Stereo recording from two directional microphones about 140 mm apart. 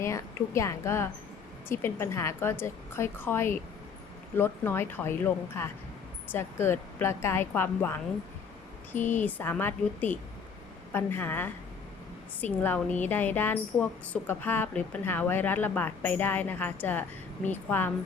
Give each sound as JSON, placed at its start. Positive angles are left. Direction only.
{"t": 0.0, "sound": "a woman's voice", "side_deg": 20}
{"t": 9.0, "sound": "speech", "side_deg": 60}
{"t": 9.2, "sound": "speech", "side_deg": 15}